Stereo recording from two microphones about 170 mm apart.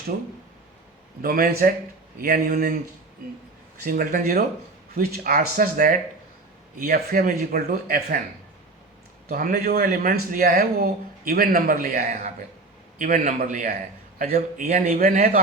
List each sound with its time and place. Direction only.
1.2 s speech: 60° right (ahead or behind)
3.8 s speech: 60° right (ahead or behind)
9.3 s a man's voice: 60° right (ahead or behind)
14.6 s a man's voice: 45° right (ahead or behind)